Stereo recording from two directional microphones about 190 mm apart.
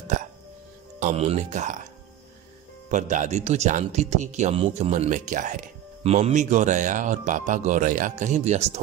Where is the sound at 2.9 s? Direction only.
40° right (ahead or behind).